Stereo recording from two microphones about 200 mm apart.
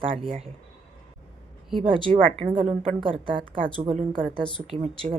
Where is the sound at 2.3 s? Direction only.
25° right (ahead or behind).